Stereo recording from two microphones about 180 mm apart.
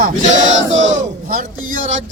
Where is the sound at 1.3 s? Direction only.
50° right (ahead or behind).